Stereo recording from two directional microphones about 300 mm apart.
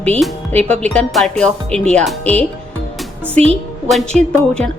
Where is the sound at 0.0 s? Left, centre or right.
Centre.